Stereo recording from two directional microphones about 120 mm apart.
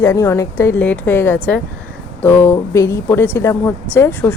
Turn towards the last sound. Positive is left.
turn(degrees=25)  # may be behind; listen again after turning